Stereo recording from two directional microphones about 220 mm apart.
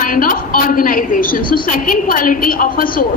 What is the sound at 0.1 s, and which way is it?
A woman's voice, 40° left (ahead or behind).